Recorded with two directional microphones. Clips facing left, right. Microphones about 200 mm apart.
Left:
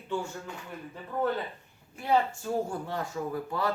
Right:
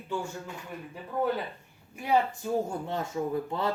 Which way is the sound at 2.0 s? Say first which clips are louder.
Even; 15° right (ahead or behind).